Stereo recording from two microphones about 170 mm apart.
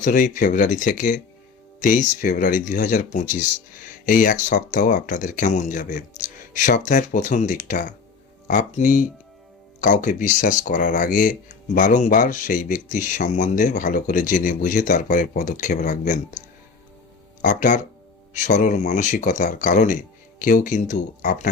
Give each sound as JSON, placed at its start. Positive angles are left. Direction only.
{"t": 0.0, "sound": "speech", "side_deg": 50}
{"t": 17.4, "sound": "speech", "side_deg": 45}